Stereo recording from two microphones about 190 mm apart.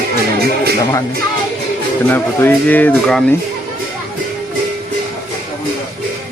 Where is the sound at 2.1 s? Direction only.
10° left (ahead or behind).